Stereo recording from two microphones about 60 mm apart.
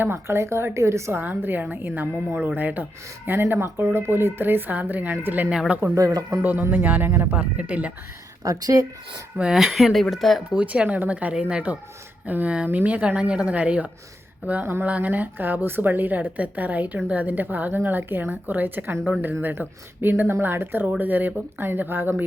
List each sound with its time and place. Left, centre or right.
0.0 s a woman's voice: right
1.1 s speech: right
3.2 s speech: right
5.5 s speech: centre
5.9 s speech: right
6.4 s speech: right
7.1 s a woman's voice: right
7.3 s a woman's voice: right
8.4 s speech: right
9.4 s speech: centre
10.5 s a woman's voice: right